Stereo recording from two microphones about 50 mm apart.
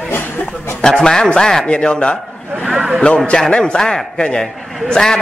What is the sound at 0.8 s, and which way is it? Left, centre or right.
A man's voice, centre.